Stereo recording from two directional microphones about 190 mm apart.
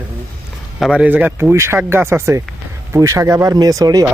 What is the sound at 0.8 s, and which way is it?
Speech, 5° right (ahead or behind).